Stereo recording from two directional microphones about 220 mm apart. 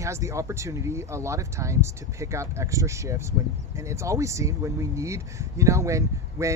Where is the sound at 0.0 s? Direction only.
15° right (ahead or behind).